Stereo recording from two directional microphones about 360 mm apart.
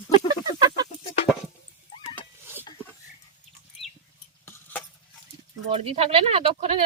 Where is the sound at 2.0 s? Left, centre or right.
Centre.